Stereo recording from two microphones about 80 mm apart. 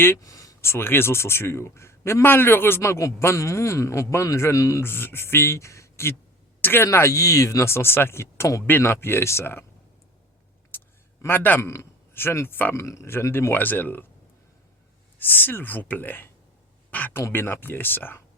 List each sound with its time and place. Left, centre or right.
0.2 s a sound: left
0.6 s a man's voice: left
4.8 s a man's voice: left
6.8 s a man's voice: left
8.6 s speech: left
10.7 s a sound: left
11.2 s speech: left
11.6 s a man's voice: left
13.5 s speech: left
15.2 s speech: left